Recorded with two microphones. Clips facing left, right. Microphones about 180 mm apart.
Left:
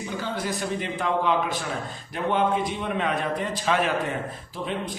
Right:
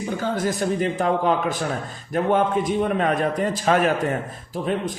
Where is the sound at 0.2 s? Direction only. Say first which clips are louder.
Right 5 dB; 45° right (ahead or behind).